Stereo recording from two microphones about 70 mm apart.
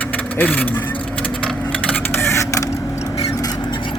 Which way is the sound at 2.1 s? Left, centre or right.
Left.